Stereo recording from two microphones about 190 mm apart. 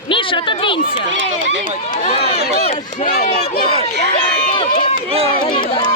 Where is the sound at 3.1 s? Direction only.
55° left (ahead or behind).